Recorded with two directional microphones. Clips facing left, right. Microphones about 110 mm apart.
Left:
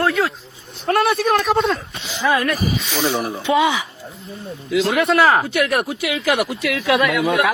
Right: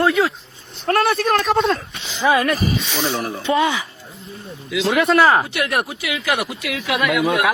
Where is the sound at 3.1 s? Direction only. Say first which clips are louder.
Left 1 dB; 10° left (ahead or behind).